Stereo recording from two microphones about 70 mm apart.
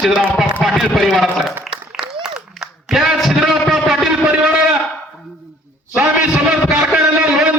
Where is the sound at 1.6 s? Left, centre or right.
Centre.